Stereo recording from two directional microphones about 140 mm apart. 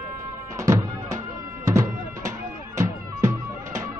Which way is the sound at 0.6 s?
20° right (ahead or behind).